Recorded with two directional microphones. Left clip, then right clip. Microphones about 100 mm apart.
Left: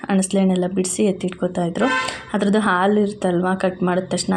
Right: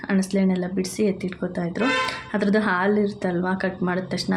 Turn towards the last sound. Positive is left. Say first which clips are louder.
# left 5 dB
turn(degrees=30)  # may be behind; listen again after turning